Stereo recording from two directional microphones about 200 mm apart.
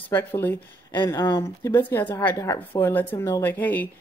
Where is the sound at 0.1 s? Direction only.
10° left (ahead or behind).